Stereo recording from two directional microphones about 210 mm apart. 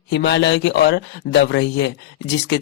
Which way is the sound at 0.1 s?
55° left (ahead or behind).